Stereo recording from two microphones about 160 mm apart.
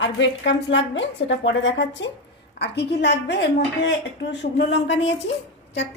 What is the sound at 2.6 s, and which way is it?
A woman's voice, 90° left.